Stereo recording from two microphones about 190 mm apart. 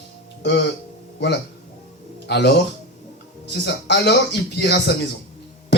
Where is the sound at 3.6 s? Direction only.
65° left (ahead or behind).